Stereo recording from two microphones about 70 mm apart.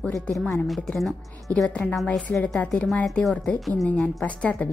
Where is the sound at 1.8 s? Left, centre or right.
Centre.